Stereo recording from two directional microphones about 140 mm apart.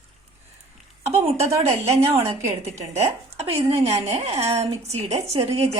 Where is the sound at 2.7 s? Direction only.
50° right (ahead or behind).